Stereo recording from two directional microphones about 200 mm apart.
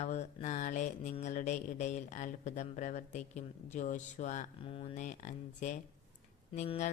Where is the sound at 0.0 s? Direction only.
35° left (ahead or behind).